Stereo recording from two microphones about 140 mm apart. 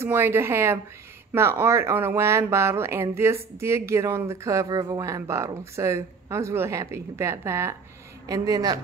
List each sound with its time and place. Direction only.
0.0 s speech: 15° right (ahead or behind)